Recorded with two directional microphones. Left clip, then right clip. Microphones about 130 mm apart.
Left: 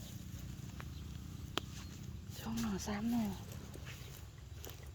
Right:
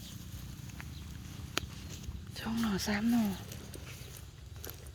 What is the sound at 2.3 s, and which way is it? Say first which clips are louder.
Speech: right 7 dB; 15° right (ahead or behind).